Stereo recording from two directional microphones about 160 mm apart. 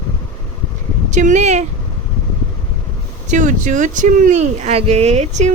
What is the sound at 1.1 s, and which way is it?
Speech, 50° right (ahead or behind).